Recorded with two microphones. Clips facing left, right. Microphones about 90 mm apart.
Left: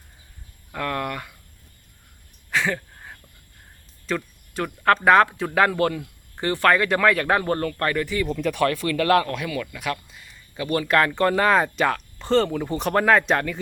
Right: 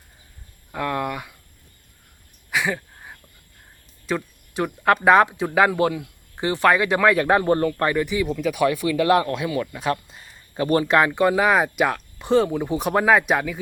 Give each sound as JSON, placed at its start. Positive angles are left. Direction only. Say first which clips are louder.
{"t": 0.7, "sound": "speech", "louder": "right 2 dB", "side_deg": -15}
{"t": 2.5, "sound": "a sound", "louder": "even", "side_deg": -10}
{"t": 4.9, "sound": "speech", "louder": "right 1 dB", "side_deg": -15}
{"t": 10.8, "sound": "speech", "louder": "left 1 dB", "side_deg": -20}